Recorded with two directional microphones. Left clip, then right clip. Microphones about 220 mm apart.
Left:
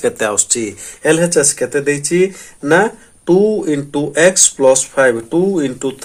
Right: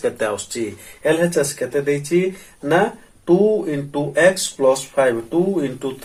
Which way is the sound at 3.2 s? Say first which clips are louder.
Left 3 dB; 45° left (ahead or behind).